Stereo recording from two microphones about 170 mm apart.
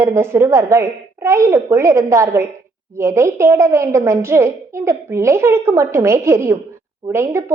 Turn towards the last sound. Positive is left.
turn(degrees=-15)  # may be behind; listen again after turning